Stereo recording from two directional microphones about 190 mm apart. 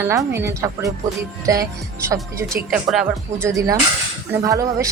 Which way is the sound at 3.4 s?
15° right (ahead or behind).